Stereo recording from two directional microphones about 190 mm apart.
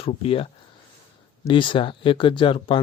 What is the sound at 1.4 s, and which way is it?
Speech, 25° left (ahead or behind).